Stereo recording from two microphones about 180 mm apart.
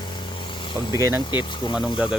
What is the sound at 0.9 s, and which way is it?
Speech, 15° right (ahead or behind).